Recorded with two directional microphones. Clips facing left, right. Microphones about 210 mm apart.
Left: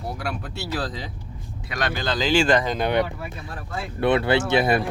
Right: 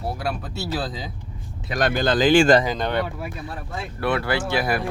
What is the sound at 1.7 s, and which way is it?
Speech, 50° right (ahead or behind).